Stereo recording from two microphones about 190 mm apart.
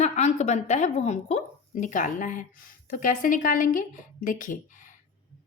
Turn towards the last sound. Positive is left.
turn(degrees=45)  # may be behind; listen again after turning